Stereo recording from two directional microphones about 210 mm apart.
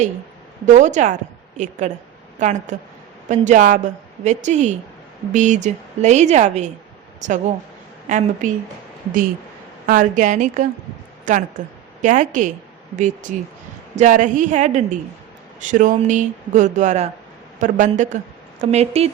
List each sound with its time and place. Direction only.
0.6 s a woman's voice: 35° right (ahead or behind)
9.8 s a woman's voice: 40° right (ahead or behind)